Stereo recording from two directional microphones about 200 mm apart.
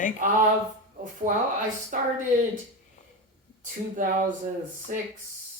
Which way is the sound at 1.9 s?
40° right (ahead or behind).